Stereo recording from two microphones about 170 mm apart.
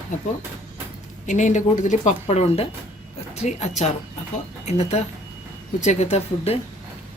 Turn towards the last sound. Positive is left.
turn(degrees=40)  # may be behind; listen again after turning